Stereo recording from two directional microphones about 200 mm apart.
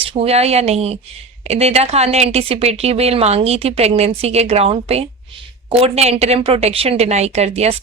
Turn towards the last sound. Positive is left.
turn(degrees=-30)  # may be behind; listen again after turning